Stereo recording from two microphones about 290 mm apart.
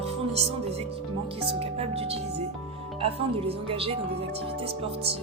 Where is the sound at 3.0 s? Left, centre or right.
Centre.